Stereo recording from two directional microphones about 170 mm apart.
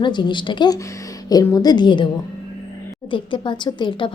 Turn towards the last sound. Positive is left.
turn(degrees=25)  # may be behind; listen again after turning